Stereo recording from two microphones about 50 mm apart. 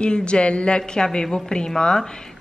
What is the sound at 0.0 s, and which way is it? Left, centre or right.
A woman's voice, centre.